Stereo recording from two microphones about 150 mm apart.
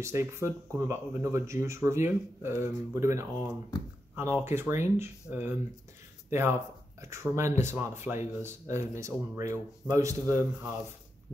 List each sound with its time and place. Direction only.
0.0 s speech: 15° right (ahead or behind)
3.7 s speech: 25° left (ahead or behind)
4.1 s speech: 15° right (ahead or behind)
7.0 s speech: 20° right (ahead or behind)